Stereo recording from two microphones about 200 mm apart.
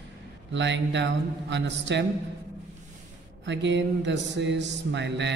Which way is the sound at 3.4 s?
65° right (ahead or behind).